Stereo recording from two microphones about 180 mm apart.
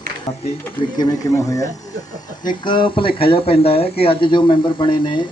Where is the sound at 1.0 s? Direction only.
20° left (ahead or behind).